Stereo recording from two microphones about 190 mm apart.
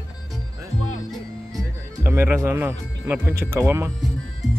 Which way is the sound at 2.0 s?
15° right (ahead or behind).